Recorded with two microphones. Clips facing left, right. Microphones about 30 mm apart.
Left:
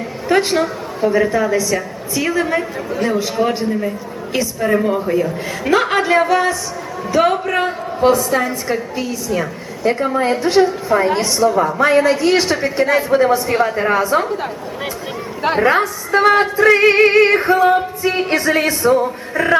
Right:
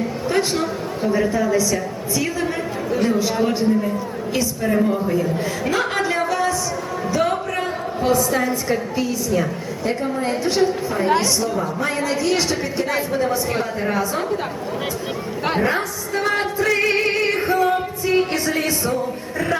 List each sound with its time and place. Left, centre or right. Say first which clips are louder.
0.3 s speech: left 6 dB; left
0.6 s a woman's voice: left 4 dB; left
8.1 s a woman's voice: left 2 dB; centre
9.8 s a woman's voice: left 7 dB; left
11.2 s a woman's voice: left 6 dB; left
12.9 s a woman's voice: left 9 dB; left
13.1 s speech: left 8 dB; left
15.6 s speech: left 6 dB; left
17.7 s music: left 2 dB; left
18.3 s speech: left 6 dB; left